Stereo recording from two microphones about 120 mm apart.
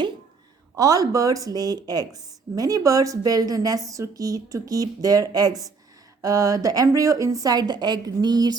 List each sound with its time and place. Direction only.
0.8 s speech: 30° right (ahead or behind)